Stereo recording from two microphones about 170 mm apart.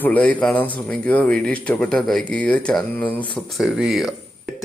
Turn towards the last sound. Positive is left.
turn(degrees=0)  # may be behind; listen again after turning